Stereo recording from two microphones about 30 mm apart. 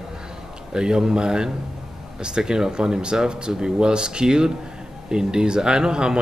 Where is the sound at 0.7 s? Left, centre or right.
Right.